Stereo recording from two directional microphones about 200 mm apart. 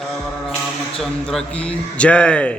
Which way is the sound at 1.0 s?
5° left (ahead or behind).